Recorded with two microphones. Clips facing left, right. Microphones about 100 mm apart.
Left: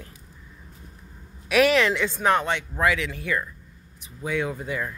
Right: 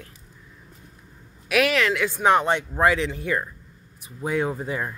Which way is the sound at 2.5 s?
35° right (ahead or behind).